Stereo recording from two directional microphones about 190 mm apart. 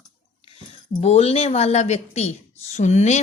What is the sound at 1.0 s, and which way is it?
Speech, 35° left (ahead or behind).